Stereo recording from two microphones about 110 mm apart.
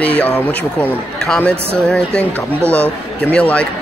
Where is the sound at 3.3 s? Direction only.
10° left (ahead or behind).